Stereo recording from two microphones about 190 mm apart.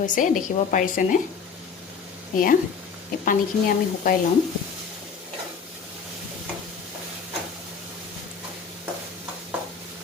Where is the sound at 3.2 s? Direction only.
50° left (ahead or behind).